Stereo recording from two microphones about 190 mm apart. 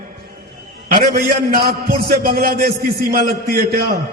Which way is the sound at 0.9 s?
55° right (ahead or behind).